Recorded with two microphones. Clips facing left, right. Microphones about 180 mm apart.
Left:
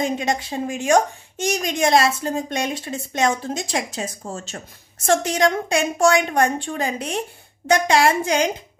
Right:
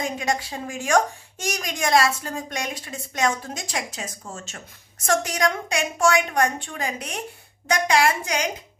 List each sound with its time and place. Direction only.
0.0 s a woman's voice: 25° left (ahead or behind)